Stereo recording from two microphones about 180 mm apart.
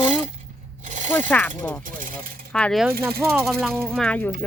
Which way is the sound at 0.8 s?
45° right (ahead or behind).